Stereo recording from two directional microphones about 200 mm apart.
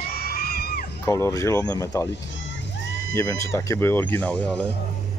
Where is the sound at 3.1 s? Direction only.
15° left (ahead or behind).